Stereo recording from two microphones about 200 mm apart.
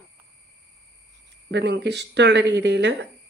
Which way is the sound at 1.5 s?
60° right (ahead or behind).